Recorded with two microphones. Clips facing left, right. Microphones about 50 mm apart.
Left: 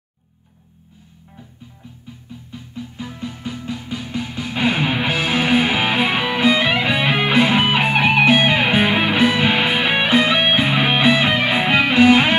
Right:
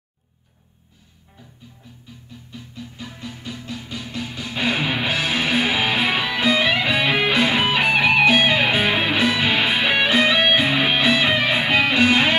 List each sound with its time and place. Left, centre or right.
2.5 s music: centre